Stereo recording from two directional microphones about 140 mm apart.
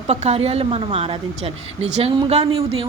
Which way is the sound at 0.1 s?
50° right (ahead or behind).